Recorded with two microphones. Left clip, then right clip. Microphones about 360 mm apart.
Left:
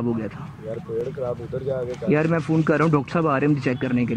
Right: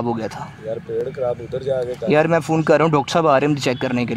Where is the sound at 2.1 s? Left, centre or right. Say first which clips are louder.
Right 6 dB; centre.